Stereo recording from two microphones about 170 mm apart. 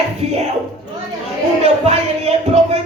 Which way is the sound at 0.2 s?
40° right (ahead or behind).